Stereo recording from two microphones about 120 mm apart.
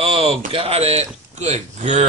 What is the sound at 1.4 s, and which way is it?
Speech, 70° right (ahead or behind).